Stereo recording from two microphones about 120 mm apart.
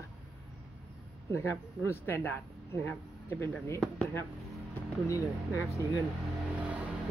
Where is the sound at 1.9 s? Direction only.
20° left (ahead or behind).